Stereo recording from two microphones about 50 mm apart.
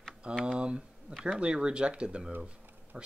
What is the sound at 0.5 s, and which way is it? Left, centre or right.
Speech, right.